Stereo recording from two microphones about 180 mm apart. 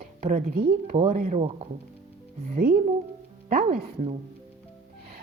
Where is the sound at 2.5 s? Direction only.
55° right (ahead or behind).